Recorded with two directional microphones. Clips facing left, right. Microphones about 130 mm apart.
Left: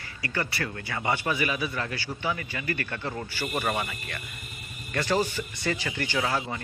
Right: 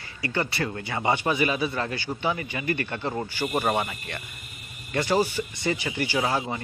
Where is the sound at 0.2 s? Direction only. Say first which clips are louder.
Right 4 dB; 25° right (ahead or behind).